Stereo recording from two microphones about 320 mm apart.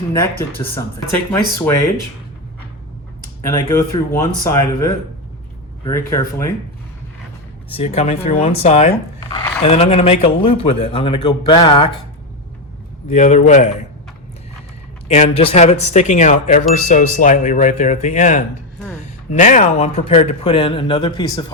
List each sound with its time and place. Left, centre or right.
1.3 s speech: centre
3.4 s speech: centre
5.8 s speech: centre
7.7 s speech: centre
13.1 s speech: left
15.0 s speech: centre